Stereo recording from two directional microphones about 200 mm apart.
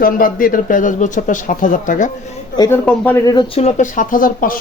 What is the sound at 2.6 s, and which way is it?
Speech, 10° left (ahead or behind).